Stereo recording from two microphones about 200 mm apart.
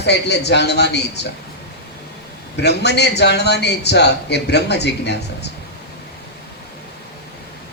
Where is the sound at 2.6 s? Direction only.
55° left (ahead or behind).